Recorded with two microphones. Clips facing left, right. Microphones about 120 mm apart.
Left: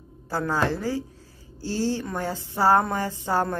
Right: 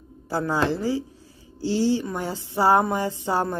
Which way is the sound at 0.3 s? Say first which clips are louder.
Right 1 dB; 15° right (ahead or behind).